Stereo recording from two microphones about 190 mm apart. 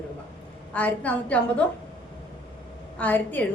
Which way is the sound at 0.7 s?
5° left (ahead or behind).